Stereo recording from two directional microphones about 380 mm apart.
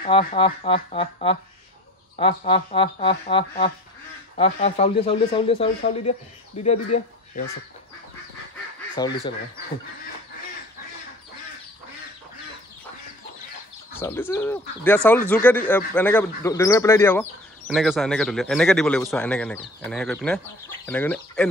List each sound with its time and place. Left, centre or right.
0.0 s speech: centre
9.0 s speech: centre
13.9 s speech: centre